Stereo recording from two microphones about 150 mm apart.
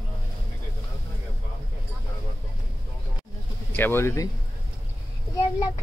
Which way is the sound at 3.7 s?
15° left (ahead or behind).